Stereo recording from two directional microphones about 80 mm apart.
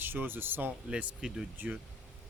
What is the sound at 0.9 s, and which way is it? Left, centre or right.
Speech, centre.